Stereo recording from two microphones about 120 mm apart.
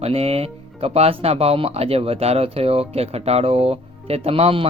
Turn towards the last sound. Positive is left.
turn(degrees=-55)  # may be behind; listen again after turning